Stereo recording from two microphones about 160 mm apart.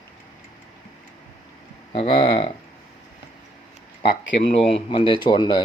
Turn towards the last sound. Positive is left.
turn(degrees=30)  # may be behind; listen again after turning